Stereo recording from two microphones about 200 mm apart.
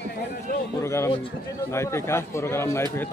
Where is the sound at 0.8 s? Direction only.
15° left (ahead or behind).